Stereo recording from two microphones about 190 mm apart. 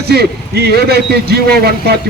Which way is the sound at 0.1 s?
55° right (ahead or behind).